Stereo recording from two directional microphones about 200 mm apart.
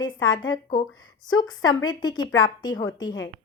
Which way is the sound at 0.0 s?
20° left (ahead or behind).